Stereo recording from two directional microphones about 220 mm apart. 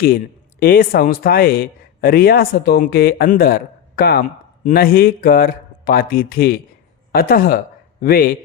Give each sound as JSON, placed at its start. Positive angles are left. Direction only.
{"t": 0.6, "sound": "speech", "side_deg": 40}